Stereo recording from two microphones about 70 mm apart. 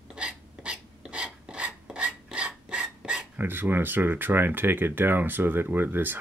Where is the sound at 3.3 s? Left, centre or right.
Right.